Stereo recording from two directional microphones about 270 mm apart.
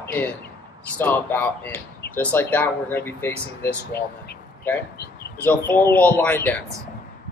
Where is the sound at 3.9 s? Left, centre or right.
Left.